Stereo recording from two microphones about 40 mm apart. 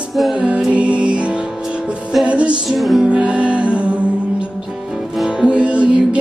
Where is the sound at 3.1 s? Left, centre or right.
Right.